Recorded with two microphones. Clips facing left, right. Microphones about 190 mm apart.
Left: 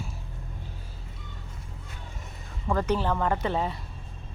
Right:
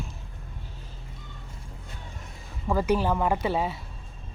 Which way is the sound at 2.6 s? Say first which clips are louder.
Right 2 dB; 10° right (ahead or behind).